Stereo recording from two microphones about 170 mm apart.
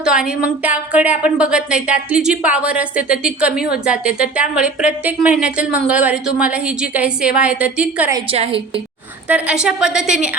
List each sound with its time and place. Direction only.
0.0 s a woman's voice: 5° right (ahead or behind)
8.3 s a woman's voice: 35° right (ahead or behind)
9.3 s a woman's voice: 5° right (ahead or behind)